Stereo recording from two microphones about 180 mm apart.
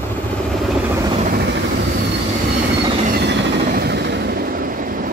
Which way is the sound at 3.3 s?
65° right (ahead or behind).